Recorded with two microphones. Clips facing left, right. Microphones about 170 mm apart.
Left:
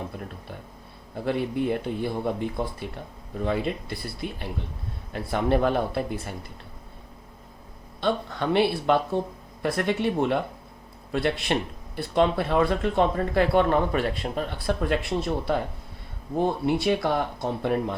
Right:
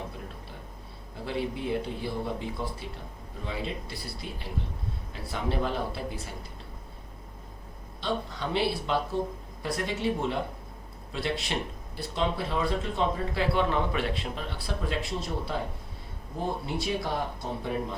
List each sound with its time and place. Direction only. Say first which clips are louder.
1.2 s speech: left 6 dB; 55° left (ahead or behind)
8.0 s speech: left 6 dB; 60° left (ahead or behind)
16.6 s speech: left 8 dB; 65° left (ahead or behind)